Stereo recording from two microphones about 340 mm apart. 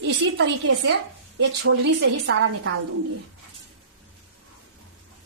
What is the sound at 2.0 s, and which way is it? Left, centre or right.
Speech, right.